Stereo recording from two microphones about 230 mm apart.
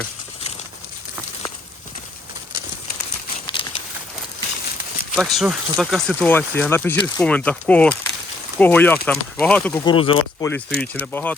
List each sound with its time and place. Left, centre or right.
3.4 s a sound: left
5.1 s speech: centre
9.8 s speech: left
10.4 s speech: centre